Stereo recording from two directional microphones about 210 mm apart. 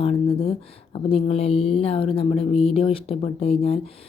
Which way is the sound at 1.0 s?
25° left (ahead or behind).